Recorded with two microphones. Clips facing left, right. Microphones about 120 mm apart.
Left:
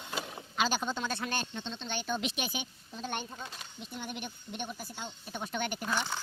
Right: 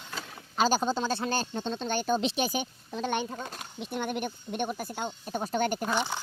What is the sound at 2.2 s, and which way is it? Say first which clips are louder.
Speech: right 7 dB; 30° right (ahead or behind).